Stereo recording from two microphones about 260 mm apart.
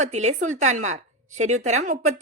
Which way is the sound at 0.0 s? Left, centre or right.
Right.